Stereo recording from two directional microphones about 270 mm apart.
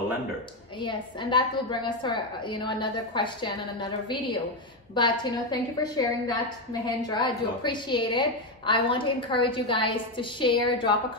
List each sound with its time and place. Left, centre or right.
0.7 s a woman's voice: centre